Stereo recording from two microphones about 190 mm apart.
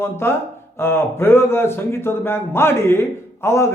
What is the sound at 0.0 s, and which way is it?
A man's voice, 15° left (ahead or behind).